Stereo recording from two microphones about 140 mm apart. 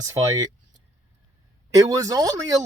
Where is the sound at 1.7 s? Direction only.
25° right (ahead or behind).